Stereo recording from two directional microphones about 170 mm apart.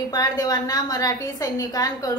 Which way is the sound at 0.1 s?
25° left (ahead or behind).